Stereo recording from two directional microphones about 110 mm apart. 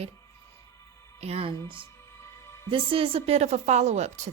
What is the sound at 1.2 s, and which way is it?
A woman's voice, 65° right (ahead or behind).